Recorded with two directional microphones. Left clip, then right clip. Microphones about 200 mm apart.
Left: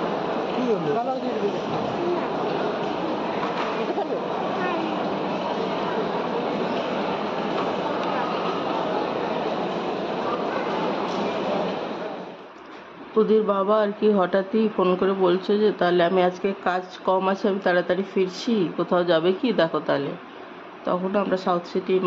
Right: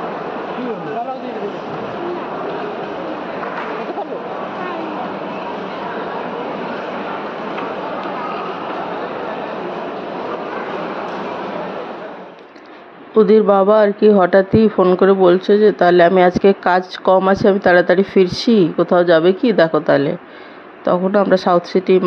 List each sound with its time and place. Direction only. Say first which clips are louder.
13.2 s a man's voice: right 9 dB; 35° right (ahead or behind)